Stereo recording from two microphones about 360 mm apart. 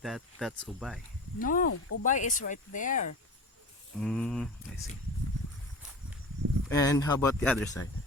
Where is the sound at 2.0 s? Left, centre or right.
Left.